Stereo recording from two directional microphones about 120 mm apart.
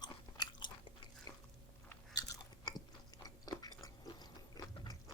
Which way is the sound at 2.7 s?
35° left (ahead or behind).